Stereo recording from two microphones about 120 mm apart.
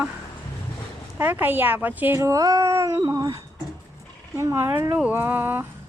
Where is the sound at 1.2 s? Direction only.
15° right (ahead or behind).